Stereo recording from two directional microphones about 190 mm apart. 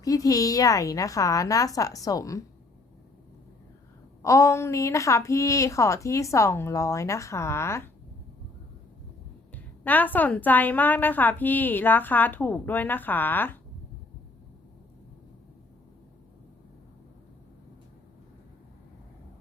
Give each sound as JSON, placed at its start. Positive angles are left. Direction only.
{"t": 0.0, "sound": "a woman's voice", "side_deg": 20}
{"t": 4.2, "sound": "a woman's voice", "side_deg": 15}
{"t": 9.8, "sound": "a woman's voice", "side_deg": 10}